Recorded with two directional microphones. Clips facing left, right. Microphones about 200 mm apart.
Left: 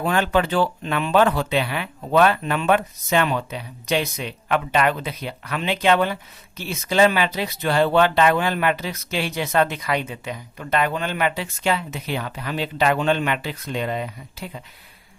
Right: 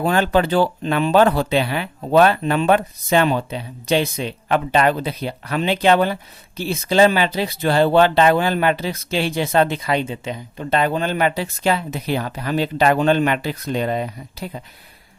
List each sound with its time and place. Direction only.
0.0 s speech: 35° right (ahead or behind)